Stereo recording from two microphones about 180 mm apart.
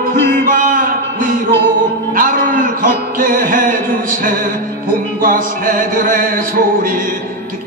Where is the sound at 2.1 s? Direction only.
50° right (ahead or behind).